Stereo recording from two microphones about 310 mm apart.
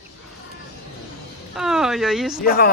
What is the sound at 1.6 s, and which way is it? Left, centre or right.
Speech, centre.